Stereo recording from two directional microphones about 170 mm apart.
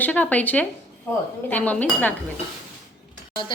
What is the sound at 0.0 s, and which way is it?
Speech, 10° left (ahead or behind).